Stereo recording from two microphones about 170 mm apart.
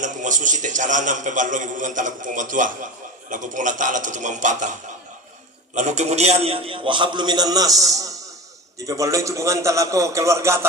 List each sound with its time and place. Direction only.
0.0 s a man's voice: 50° right (ahead or behind)
5.7 s a man's voice: 45° right (ahead or behind); by 10.7 s 15° right (ahead or behind)